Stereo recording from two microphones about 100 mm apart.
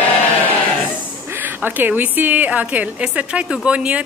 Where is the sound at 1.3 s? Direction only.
20° right (ahead or behind).